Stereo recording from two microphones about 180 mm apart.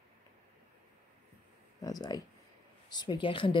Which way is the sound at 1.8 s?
20° left (ahead or behind).